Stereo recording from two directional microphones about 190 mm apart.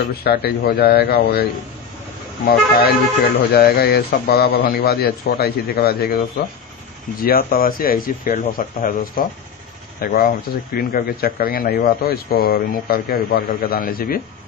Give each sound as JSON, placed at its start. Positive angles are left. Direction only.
{"t": 0.3, "sound": "speech", "side_deg": 55}
{"t": 2.5, "sound": "speech", "side_deg": 50}